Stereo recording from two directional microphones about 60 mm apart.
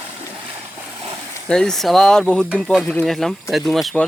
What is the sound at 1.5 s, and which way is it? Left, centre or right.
Speech, centre.